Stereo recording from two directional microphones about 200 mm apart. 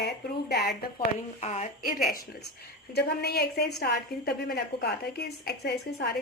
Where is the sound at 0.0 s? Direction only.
55° left (ahead or behind).